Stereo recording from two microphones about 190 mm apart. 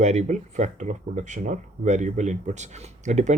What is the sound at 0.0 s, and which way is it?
Speech, 35° right (ahead or behind).